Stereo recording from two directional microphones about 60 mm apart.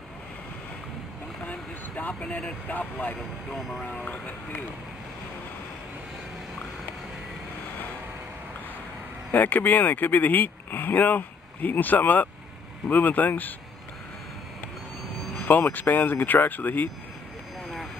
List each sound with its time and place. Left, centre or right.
1.5 s a sound: left
2.7 s speech: left
3.5 s speech: centre
3.8 s speech: left
9.3 s speech: left
15.3 s speech: left